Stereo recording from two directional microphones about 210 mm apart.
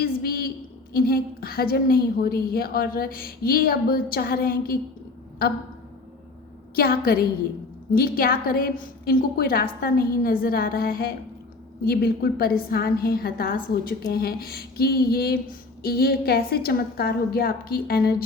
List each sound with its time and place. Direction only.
0.0 s a sound: 45° left (ahead or behind)
0.9 s a woman's voice: 45° left (ahead or behind)
6.7 s a woman's voice: 45° left (ahead or behind)